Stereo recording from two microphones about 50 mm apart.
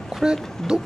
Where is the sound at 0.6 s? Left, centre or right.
Centre.